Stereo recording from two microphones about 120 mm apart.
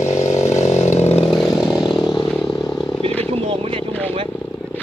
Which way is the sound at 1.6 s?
5° right (ahead or behind).